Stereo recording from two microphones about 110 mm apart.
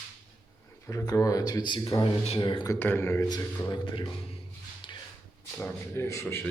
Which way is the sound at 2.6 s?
20° left (ahead or behind).